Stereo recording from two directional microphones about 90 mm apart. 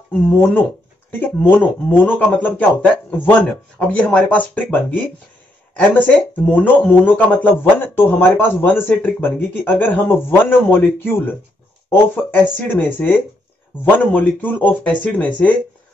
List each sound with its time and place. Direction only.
0.3 s speech: 20° left (ahead or behind)
11.9 s speech: 20° left (ahead or behind)